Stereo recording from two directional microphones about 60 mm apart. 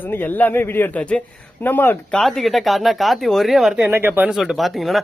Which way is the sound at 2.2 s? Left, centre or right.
Centre.